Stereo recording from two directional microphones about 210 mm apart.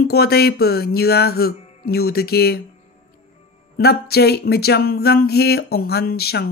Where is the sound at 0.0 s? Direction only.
50° left (ahead or behind).